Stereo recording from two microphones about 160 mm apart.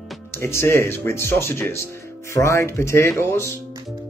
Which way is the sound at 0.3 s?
15° left (ahead or behind).